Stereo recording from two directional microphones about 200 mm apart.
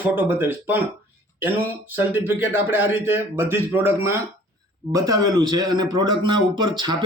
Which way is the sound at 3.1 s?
10° right (ahead or behind).